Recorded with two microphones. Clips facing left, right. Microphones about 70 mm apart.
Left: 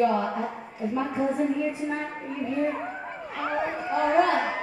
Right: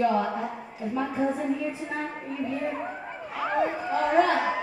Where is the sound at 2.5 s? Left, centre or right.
Centre.